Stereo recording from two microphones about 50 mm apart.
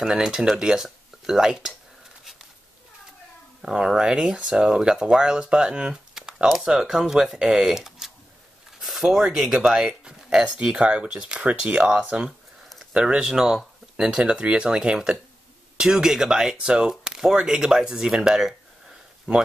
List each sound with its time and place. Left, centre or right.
0.0 s speech: centre
3.6 s speech: centre